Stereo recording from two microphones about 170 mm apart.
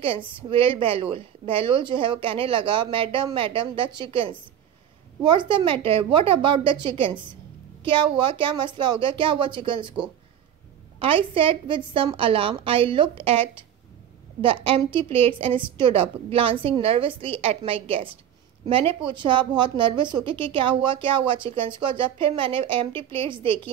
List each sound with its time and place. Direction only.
0.0 s a woman's voice: 30° right (ahead or behind)
11.0 s a woman's voice: 30° right (ahead or behind)